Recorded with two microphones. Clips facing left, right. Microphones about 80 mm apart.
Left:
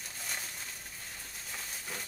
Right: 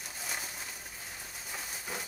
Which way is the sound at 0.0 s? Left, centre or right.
Centre.